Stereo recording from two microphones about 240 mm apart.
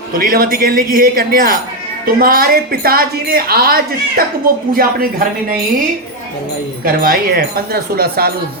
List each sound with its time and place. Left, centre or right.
0.2 s a woman's voice: right
6.8 s a woman's voice: right